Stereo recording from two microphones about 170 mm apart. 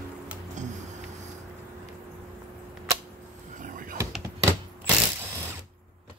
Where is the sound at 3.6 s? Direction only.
55° right (ahead or behind).